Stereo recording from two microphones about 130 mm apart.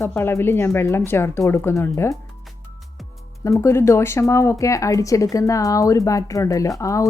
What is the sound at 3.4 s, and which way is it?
Speech, 25° left (ahead or behind).